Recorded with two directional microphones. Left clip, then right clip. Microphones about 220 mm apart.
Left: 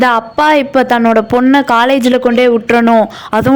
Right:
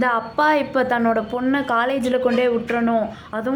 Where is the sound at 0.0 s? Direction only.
35° left (ahead or behind).